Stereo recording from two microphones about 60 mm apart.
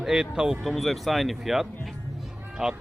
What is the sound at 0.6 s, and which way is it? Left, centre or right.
Speech, centre.